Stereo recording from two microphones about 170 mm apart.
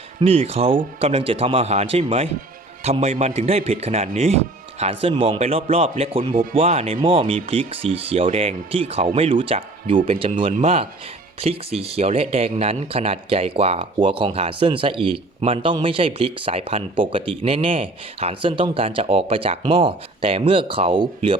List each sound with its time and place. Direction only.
0.2 s speech: 35° right (ahead or behind)
6.3 s speech: 55° right (ahead or behind)
6.6 s speech: 35° right (ahead or behind)